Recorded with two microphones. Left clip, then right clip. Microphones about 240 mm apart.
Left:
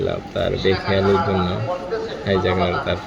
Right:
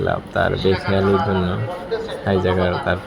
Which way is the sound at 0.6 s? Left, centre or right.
Right.